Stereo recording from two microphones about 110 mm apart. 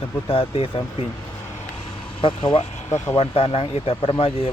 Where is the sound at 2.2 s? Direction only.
50° left (ahead or behind).